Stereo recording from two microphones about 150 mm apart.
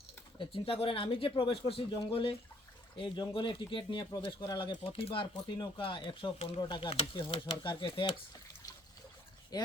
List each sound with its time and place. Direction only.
0.3 s speech: 35° left (ahead or behind)
4.8 s speech: 40° left (ahead or behind)
9.5 s speech: 25° left (ahead or behind)